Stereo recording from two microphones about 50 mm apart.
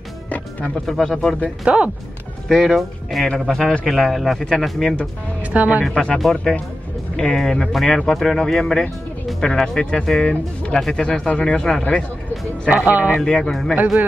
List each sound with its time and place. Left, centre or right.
0.8 s speech: centre
1.6 s speech: centre
2.4 s speech: centre
5.4 s speech: right
6.3 s speech: left
7.2 s speech: centre
12.6 s speech: right
13.2 s speech: centre